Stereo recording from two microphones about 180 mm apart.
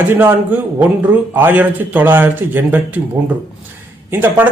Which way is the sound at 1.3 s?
10° right (ahead or behind).